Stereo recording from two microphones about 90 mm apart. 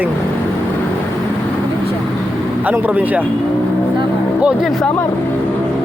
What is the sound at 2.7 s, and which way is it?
Speech, 20° right (ahead or behind).